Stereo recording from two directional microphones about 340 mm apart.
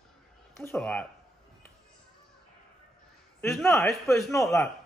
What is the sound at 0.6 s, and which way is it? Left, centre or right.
Speech, centre.